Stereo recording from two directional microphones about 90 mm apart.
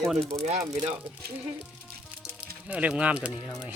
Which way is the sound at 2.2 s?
15° right (ahead or behind).